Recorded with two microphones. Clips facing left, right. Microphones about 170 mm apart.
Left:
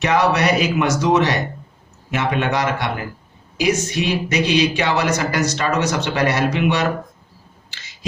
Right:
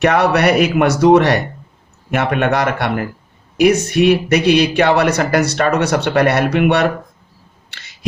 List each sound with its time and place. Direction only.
0.0 s speech: 60° right (ahead or behind)